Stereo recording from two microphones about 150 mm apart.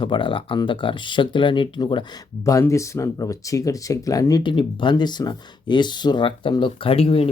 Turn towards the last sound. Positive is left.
turn(degrees=40)  # may be behind; listen again after turning